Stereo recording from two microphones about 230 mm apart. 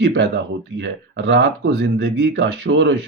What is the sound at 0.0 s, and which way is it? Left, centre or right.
Speech, right.